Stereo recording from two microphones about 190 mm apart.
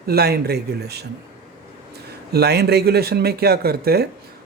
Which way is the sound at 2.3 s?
60° right (ahead or behind).